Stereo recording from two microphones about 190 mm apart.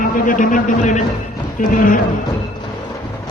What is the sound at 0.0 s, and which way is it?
A man's voice, 45° left (ahead or behind).